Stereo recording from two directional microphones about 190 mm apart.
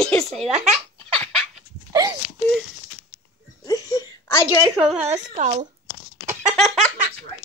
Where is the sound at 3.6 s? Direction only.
20° left (ahead or behind).